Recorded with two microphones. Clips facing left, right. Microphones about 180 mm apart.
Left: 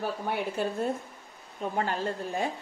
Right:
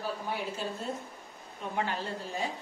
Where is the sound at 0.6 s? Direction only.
55° left (ahead or behind).